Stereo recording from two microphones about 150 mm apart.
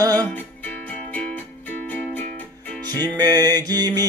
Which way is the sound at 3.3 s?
25° right (ahead or behind).